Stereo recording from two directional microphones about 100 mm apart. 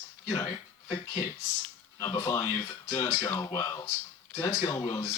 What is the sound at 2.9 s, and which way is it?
Speech, 30° left (ahead or behind).